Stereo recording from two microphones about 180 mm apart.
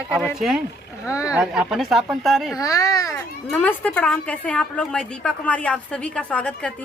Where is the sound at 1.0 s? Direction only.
15° left (ahead or behind).